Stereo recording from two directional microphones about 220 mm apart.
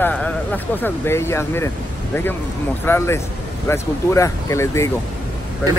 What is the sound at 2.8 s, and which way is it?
Speech, 10° left (ahead or behind).